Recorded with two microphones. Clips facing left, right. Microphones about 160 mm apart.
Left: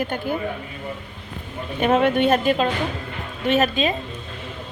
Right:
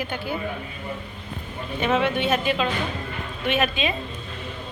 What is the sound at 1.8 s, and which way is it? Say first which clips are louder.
Speech: left 5 dB; 45° left (ahead or behind).